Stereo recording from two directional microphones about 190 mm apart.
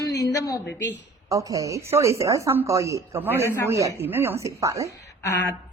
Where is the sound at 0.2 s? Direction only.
20° left (ahead or behind).